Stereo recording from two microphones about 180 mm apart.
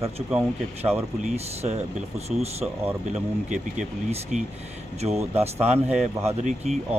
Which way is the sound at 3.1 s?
40° right (ahead or behind).